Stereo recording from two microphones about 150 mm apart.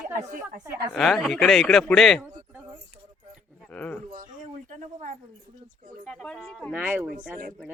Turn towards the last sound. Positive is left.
turn(degrees=-10)  # may be behind; listen again after turning